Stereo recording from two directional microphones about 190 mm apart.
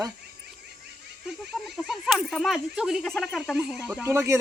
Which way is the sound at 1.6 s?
Centre (ahead or behind).